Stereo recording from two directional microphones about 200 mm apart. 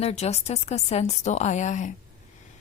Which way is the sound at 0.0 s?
30° left (ahead or behind).